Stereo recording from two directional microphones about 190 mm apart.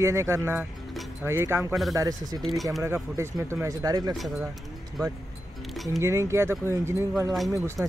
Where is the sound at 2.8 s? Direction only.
15° right (ahead or behind).